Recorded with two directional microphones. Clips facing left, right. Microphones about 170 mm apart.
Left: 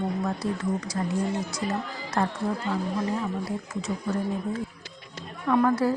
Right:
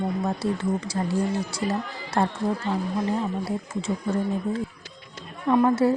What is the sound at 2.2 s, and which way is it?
A woman's voice, 30° right (ahead or behind).